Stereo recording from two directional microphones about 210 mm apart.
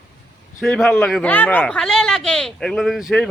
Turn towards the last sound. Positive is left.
turn(degrees=0)  # may be behind; listen again after turning